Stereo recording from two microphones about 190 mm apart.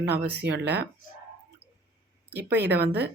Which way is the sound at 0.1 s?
60° right (ahead or behind).